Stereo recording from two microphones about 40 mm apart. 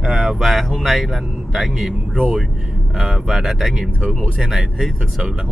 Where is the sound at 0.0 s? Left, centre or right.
Centre.